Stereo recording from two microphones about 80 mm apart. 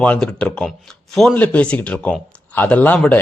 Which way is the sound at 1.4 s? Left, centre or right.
Centre.